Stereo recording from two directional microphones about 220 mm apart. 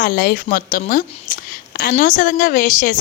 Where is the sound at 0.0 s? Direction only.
40° left (ahead or behind).